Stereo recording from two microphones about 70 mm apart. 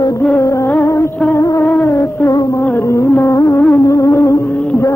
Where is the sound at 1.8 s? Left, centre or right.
Left.